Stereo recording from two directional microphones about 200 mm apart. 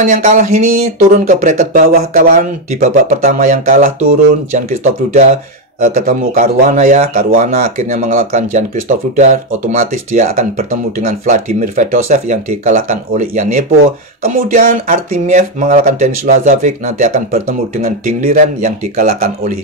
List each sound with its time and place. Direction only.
0.0 s speech: 40° right (ahead or behind)